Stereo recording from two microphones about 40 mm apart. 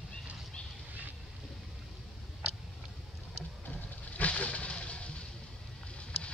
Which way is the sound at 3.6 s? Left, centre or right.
Left.